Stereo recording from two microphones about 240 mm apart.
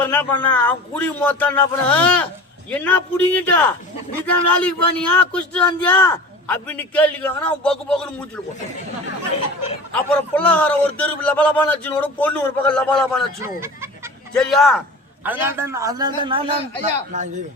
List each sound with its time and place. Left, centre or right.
0.0 s a sound: centre
0.4 s speech: centre
9.9 s speech: centre
13.6 s chicken: centre
14.3 s a man's voice: centre; by 17.2 s right